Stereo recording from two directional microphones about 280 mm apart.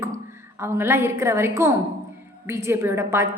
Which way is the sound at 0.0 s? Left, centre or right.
Centre.